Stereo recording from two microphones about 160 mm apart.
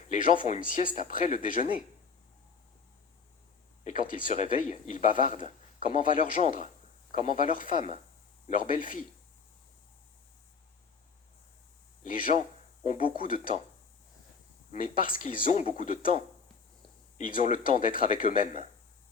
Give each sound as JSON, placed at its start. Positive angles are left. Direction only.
{"t": 0.1, "sound": "speech", "side_deg": 55}
{"t": 3.8, "sound": "speech", "side_deg": 55}
{"t": 12.1, "sound": "speech", "side_deg": 60}
{"t": 14.7, "sound": "speech", "side_deg": 60}
{"t": 17.2, "sound": "speech", "side_deg": 55}